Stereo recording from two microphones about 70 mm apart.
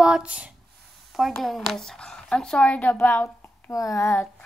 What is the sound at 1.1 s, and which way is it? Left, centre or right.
Speech, centre.